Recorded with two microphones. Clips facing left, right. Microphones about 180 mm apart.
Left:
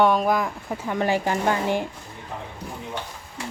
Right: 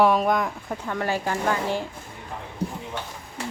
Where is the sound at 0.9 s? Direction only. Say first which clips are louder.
Left 4 dB; 15° left (ahead or behind).